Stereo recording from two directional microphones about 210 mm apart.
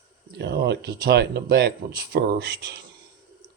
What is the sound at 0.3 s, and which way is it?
Speech, 50° right (ahead or behind).